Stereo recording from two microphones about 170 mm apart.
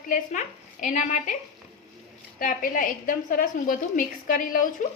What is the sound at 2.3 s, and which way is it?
A woman's voice, 55° left (ahead or behind).